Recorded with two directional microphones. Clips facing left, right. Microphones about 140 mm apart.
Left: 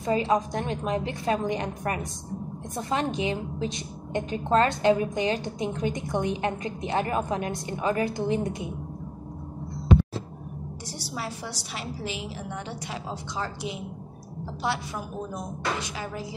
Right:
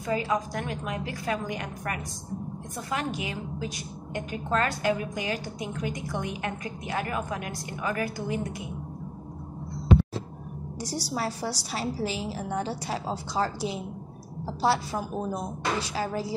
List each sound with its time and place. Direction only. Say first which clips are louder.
0.0 s a woman's voice: left 4 dB; 25° left (ahead or behind)
10.8 s a woman's voice: right 6 dB; 40° right (ahead or behind)